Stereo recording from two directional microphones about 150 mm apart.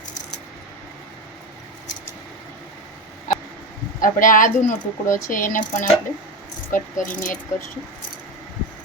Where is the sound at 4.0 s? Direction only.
65° left (ahead or behind).